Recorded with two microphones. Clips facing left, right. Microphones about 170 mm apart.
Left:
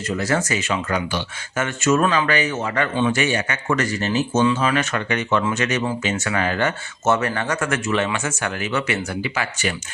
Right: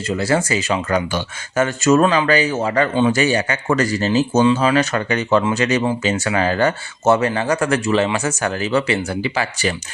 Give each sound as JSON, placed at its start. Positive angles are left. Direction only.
{"t": 0.2, "sound": "speech", "side_deg": -30}